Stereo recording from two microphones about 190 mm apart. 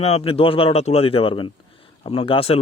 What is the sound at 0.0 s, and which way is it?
Speech, 30° left (ahead or behind).